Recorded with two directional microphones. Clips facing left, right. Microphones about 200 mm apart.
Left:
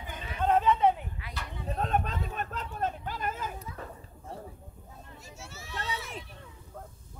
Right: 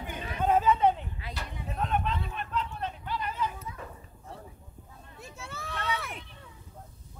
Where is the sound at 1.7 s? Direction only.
40° left (ahead or behind).